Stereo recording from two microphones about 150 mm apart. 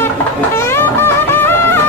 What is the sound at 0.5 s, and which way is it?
Music, 15° left (ahead or behind).